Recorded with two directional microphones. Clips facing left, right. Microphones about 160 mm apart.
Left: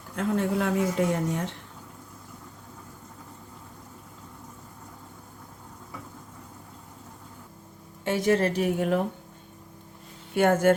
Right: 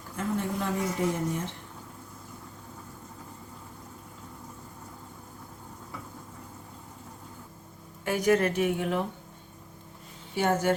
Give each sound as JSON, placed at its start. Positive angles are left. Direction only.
{"t": 0.2, "sound": "a woman's voice", "side_deg": 80}
{"t": 8.0, "sound": "a woman's voice", "side_deg": 25}
{"t": 10.3, "sound": "speech", "side_deg": 55}